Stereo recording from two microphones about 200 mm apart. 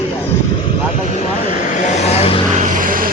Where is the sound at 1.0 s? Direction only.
35° left (ahead or behind).